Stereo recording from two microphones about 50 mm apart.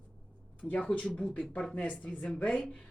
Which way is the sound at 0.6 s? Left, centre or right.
Centre.